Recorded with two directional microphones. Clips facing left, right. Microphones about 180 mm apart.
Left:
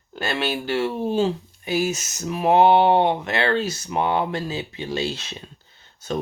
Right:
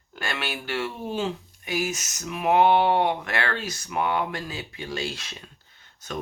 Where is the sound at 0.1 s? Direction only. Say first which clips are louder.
Left 7 dB; 30° left (ahead or behind).